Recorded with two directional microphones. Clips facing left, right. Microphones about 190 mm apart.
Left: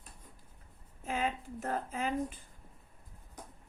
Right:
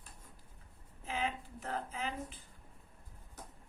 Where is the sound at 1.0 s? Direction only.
45° left (ahead or behind).